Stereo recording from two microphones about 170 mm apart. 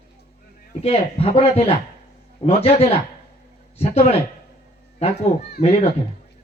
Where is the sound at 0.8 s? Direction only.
35° left (ahead or behind).